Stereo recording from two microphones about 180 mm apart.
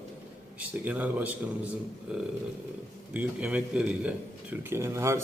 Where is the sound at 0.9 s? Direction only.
10° right (ahead or behind).